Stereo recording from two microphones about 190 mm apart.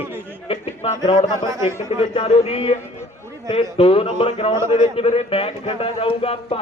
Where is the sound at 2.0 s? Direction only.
30° left (ahead or behind).